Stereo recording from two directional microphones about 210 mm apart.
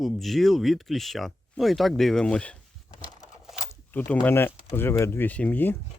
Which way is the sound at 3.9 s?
10° left (ahead or behind).